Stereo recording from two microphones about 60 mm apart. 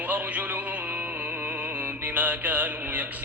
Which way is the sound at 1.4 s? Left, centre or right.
Right.